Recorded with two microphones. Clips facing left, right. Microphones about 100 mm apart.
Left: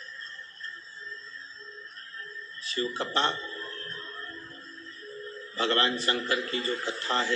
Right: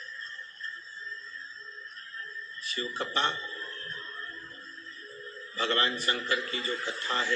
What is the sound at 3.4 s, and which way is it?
Music, 40° left (ahead or behind).